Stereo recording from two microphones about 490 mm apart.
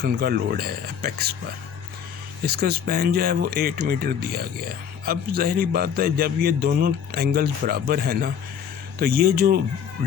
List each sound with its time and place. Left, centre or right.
0.0 s speech: centre
2.5 s speech: centre